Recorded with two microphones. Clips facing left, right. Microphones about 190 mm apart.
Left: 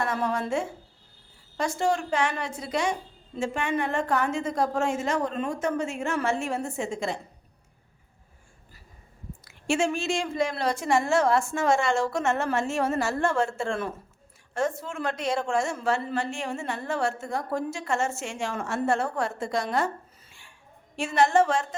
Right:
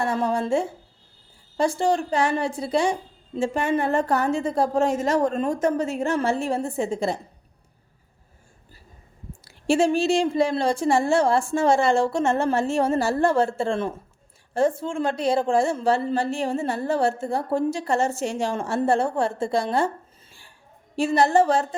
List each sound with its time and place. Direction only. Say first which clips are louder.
0.0 s a woman's voice: right 4 dB; 30° right (ahead or behind)
9.4 s a woman's voice: right 5 dB; 35° right (ahead or behind)
20.9 s a woman's voice: right 3 dB; 35° right (ahead or behind)